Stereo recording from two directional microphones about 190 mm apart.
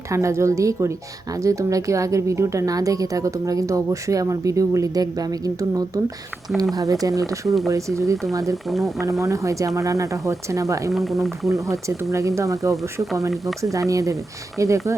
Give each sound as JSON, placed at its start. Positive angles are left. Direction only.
{"t": 0.1, "sound": "a woman's voice", "side_deg": -15}
{"t": 7.4, "sound": "speech", "side_deg": 0}
{"t": 7.7, "sound": "a woman's voice", "side_deg": -15}
{"t": 10.9, "sound": "speech", "side_deg": 0}
{"t": 11.4, "sound": "a woman's voice", "side_deg": -15}